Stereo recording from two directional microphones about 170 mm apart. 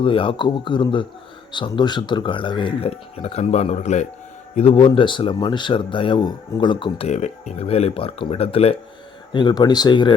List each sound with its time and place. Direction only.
0.0 s speech: 30° left (ahead or behind)
7.1 s speech: 40° left (ahead or behind); by 10.2 s 25° left (ahead or behind)